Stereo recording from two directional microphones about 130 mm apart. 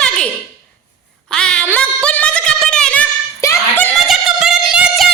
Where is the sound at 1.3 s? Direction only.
5° left (ahead or behind).